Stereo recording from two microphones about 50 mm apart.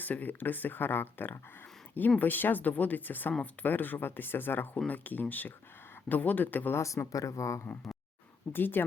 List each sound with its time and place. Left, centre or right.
0.0 s speech: left
6.7 s speech: left
8.5 s a woman's voice: left